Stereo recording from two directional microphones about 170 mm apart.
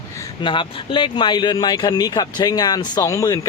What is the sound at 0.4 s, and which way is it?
Speech, 30° left (ahead or behind).